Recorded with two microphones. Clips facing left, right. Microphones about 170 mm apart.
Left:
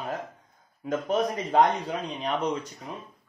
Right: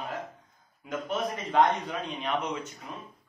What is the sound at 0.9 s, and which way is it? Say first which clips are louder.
Speech: left 5 dB; 40° left (ahead or behind).